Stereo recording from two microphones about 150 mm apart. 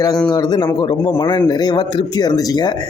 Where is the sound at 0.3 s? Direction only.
30° left (ahead or behind).